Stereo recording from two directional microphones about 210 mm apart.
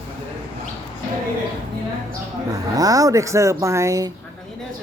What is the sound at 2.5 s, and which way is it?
Speech, 15° right (ahead or behind).